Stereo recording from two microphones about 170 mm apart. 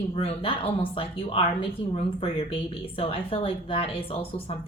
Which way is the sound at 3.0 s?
35° left (ahead or behind).